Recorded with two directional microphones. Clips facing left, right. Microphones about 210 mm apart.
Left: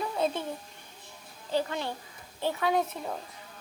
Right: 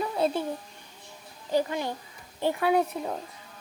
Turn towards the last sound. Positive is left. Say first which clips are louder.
# right 4 dB
turn(degrees=-10)  # may be behind; listen again after turning